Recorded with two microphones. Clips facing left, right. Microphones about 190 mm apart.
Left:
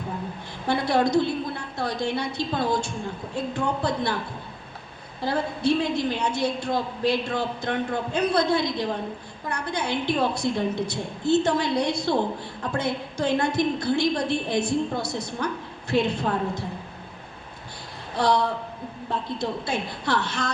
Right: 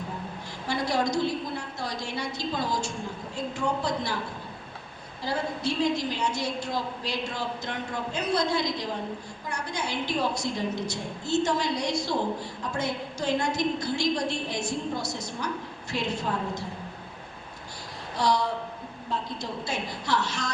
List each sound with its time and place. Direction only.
0.7 s a woman's voice: 60° left (ahead or behind)
5.2 s a woman's voice: 60° left (ahead or behind)
18.2 s a woman's voice: 60° left (ahead or behind)